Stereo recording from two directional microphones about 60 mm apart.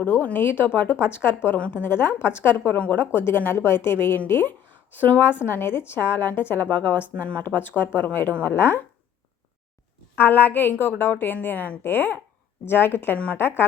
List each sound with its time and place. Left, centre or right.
0.0 s a woman's voice: left
1.5 s a woman's voice: centre
1.8 s a woman's voice: left
2.7 s a woman's voice: left
3.0 s a woman's voice: left
10.2 s a woman's voice: left